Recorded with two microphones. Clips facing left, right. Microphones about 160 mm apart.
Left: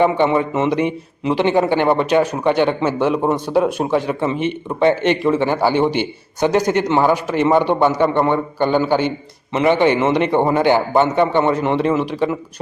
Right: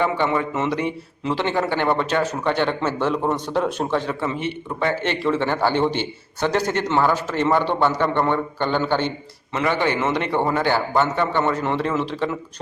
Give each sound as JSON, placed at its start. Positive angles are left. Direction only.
{"t": 0.0, "sound": "a man's voice", "side_deg": 20}